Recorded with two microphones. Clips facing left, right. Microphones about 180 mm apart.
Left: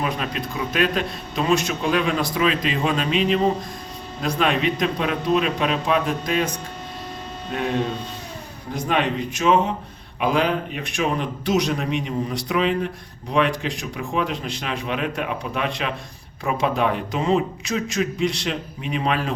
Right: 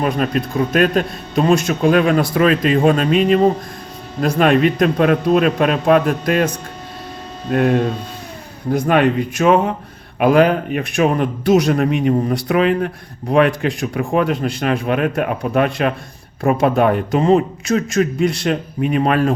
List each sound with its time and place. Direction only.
0.0 s speech: 50° right (ahead or behind)
7.5 s speech: 55° right (ahead or behind)
8.9 s a man's voice: 55° right (ahead or behind)